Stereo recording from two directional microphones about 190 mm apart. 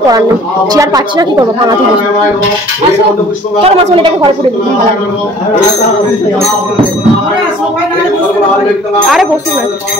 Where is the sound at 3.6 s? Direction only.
30° right (ahead or behind).